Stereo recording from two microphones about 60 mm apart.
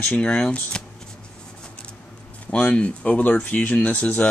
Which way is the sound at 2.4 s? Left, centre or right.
Left.